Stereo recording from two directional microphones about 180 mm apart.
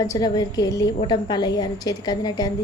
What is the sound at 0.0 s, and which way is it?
A woman's voice, 20° left (ahead or behind).